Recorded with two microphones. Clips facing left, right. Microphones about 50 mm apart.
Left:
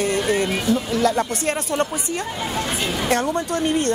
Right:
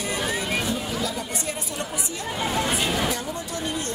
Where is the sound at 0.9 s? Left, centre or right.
Left.